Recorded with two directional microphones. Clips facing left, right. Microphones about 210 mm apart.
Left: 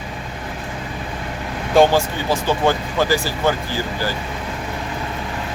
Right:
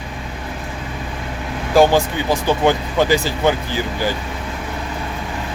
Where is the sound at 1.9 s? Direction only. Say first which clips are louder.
Right 2 dB; 15° right (ahead or behind).